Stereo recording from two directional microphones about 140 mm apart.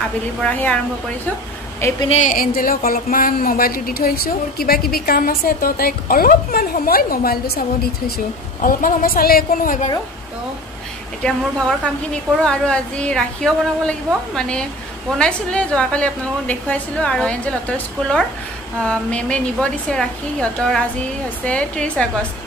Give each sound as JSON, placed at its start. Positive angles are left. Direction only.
{"t": 0.4, "sound": "a woman's voice", "side_deg": 10}
{"t": 2.0, "sound": "speech", "side_deg": 60}
{"t": 11.2, "sound": "a woman's voice", "side_deg": 5}